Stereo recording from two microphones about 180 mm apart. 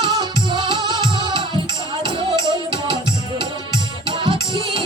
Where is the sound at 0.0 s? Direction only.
25° right (ahead or behind).